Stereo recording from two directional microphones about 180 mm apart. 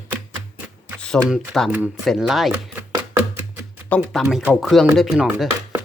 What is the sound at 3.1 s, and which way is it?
Music, 10° right (ahead or behind).